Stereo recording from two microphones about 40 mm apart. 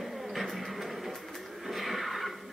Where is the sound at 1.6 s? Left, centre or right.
Centre.